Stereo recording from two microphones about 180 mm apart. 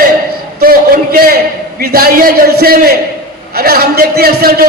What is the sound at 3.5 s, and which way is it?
A man's voice, 60° right (ahead or behind).